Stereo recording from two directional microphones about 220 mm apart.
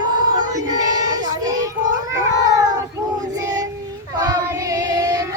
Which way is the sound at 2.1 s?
15° right (ahead or behind).